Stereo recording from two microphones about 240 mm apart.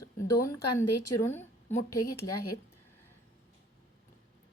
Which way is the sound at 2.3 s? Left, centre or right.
Left.